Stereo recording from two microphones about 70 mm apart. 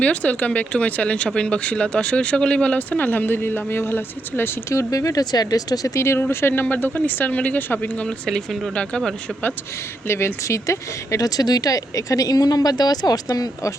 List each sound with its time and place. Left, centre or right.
0.0 s speech: centre
4.7 s speech: left
5.2 s speech: left
6.0 s speech: left
8.0 s speech: centre
10.1 s speech: left